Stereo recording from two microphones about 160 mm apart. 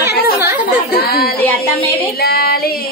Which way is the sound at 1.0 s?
70° left (ahead or behind).